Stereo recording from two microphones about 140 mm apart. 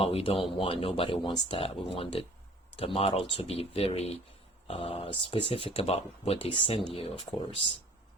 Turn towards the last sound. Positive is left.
turn(degrees=40)  # may be behind; listen again after turning